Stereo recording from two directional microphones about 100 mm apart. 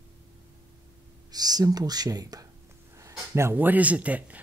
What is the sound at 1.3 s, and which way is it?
Speech, 40° right (ahead or behind).